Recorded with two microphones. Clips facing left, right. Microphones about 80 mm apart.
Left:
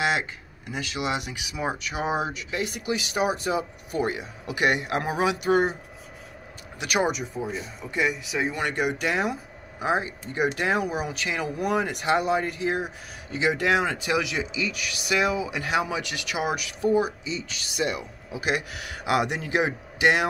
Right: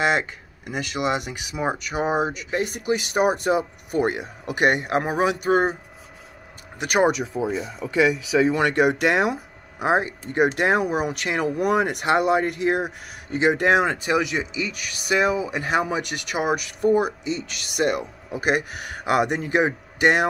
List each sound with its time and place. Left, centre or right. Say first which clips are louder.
0.9 s speech: right 4 dB; right
6.8 s speech: right 5 dB; right
7.4 s speech: right 7 dB; right